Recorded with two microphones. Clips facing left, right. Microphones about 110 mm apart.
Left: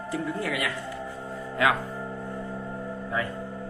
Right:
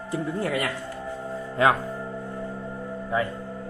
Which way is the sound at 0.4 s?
35° right (ahead or behind).